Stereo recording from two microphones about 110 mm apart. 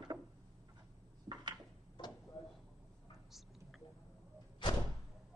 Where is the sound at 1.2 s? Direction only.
40° right (ahead or behind).